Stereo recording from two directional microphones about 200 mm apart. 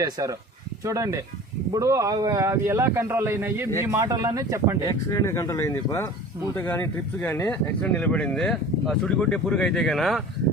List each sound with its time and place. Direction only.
0.0 s speech: 15° right (ahead or behind)
4.9 s speech: 15° left (ahead or behind); by 10.2 s centre (ahead or behind)